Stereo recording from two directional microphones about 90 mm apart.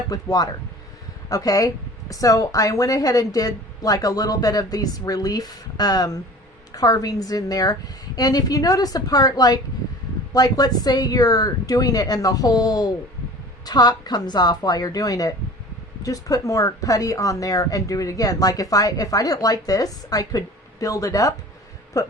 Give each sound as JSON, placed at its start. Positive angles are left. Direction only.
{"t": 0.1, "sound": "speech", "side_deg": 45}